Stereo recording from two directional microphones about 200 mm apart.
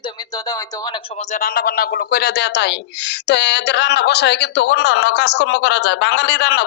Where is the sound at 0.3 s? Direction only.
20° left (ahead or behind).